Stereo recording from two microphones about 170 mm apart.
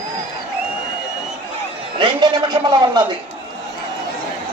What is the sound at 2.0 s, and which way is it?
A man's voice, 25° right (ahead or behind).